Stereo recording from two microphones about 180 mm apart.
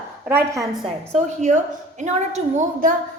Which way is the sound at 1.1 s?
45° right (ahead or behind).